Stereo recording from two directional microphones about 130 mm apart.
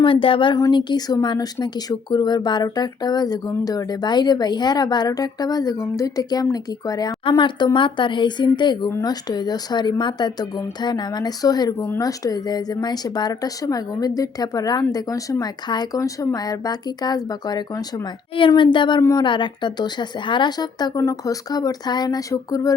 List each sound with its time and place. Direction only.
0.0 s speech: 45° left (ahead or behind)
18.3 s speech: 40° left (ahead or behind)